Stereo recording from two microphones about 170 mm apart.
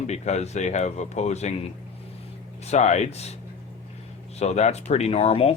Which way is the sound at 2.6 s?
40° left (ahead or behind).